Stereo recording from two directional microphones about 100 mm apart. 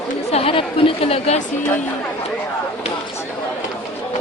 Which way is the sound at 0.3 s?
80° left.